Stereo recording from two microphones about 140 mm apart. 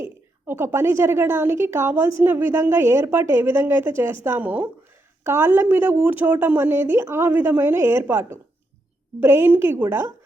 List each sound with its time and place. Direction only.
0.0 s a woman's voice: 15° right (ahead or behind)